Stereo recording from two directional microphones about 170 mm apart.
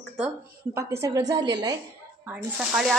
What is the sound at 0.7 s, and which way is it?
A woman's voice, 15° right (ahead or behind).